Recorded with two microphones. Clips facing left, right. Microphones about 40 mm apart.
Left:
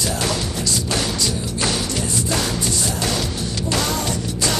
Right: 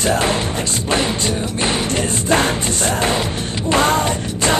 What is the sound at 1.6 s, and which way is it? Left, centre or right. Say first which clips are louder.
Music: right 3 dB; right.